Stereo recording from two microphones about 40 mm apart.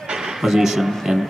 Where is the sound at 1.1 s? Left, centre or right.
Centre.